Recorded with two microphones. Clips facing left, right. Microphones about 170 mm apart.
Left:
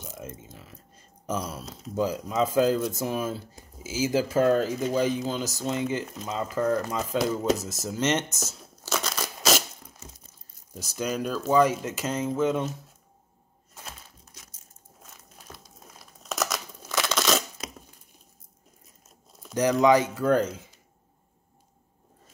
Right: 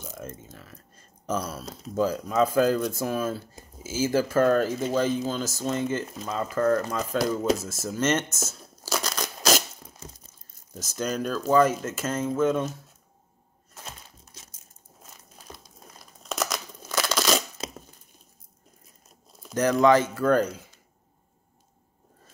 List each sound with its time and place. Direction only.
0.0 s a sound: 15° left (ahead or behind)
0.6 s speech: 15° left (ahead or behind)
7.2 s speech: 5° left (ahead or behind)
7.6 s speech: 15° left (ahead or behind)
8.8 s a sound: centre (ahead or behind)
10.7 s speech: 10° left (ahead or behind)
15.3 s crumpling: centre (ahead or behind)
17.6 s a sound: 30° right (ahead or behind)
19.5 s speech: 15° left (ahead or behind)